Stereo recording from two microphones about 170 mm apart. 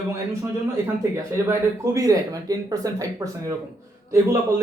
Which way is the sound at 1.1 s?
15° right (ahead or behind).